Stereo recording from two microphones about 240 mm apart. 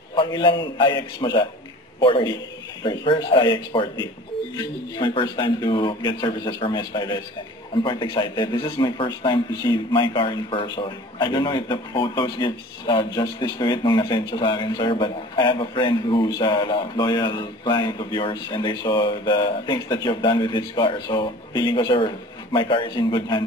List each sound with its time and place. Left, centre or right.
0.1 s a man's voice: centre